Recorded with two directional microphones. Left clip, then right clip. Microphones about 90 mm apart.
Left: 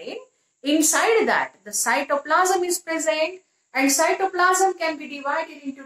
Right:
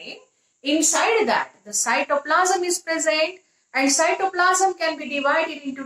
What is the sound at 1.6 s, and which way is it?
Speech, 10° left (ahead or behind).